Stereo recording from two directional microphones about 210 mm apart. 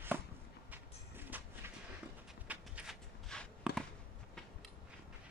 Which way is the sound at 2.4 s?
5° right (ahead or behind).